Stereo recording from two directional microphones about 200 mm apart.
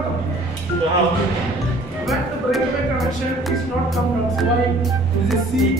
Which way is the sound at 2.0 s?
Centre (ahead or behind).